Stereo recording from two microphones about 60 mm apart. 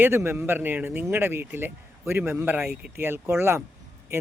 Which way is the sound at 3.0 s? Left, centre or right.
Right.